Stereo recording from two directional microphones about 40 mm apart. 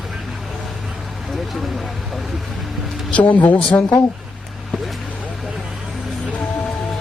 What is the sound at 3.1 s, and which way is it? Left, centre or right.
Speech, left.